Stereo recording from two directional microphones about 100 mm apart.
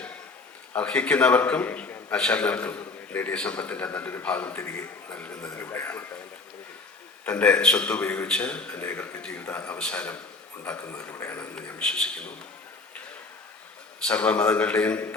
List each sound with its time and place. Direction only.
0.8 s a man's voice: 15° left (ahead or behind)
7.3 s a man's voice: 15° left (ahead or behind)
14.1 s a man's voice: 15° left (ahead or behind)